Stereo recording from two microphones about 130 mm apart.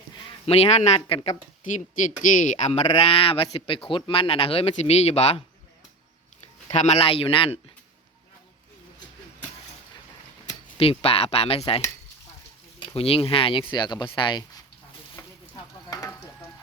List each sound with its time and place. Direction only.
0.4 s speech: 50° left (ahead or behind)
6.7 s speech: 55° left (ahead or behind)
10.8 s speech: 50° left (ahead or behind)
12.8 s speech: 45° left (ahead or behind)
15.2 s a sound: 25° left (ahead or behind)
15.5 s stir: 30° left (ahead or behind)